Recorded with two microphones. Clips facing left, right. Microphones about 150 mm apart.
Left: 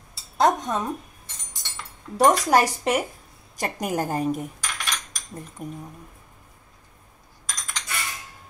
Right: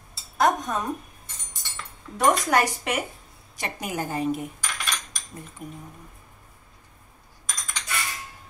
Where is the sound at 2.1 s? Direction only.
35° left (ahead or behind).